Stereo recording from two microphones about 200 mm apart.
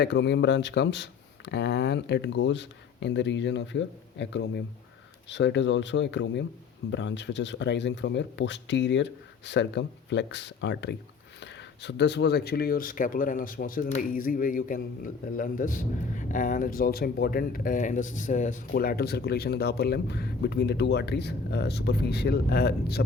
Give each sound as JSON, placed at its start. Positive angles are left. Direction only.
{"t": 0.0, "sound": "speech", "side_deg": 60}